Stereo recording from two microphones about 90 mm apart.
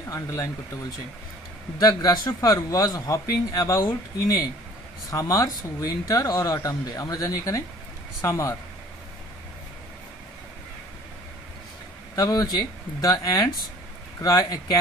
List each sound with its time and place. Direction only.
0.1 s speech: 35° left (ahead or behind)
1.8 s a man's voice: 45° left (ahead or behind)
12.2 s a man's voice: 50° left (ahead or behind)